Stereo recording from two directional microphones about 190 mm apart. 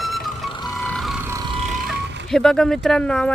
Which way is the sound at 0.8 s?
Centre (ahead or behind).